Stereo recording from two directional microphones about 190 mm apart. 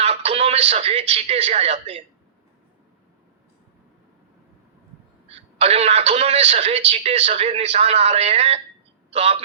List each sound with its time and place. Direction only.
0.0 s a man's voice: 30° right (ahead or behind)
5.3 s a man's voice: 30° right (ahead or behind)